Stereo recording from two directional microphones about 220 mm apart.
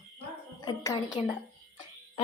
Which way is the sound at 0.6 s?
15° left (ahead or behind).